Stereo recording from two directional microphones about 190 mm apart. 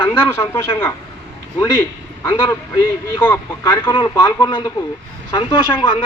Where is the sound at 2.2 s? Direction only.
15° left (ahead or behind).